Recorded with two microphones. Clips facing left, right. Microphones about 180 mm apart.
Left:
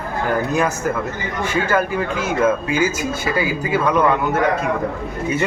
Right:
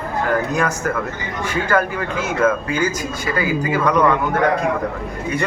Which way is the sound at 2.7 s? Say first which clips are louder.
Left 2 dB; 10° left (ahead or behind).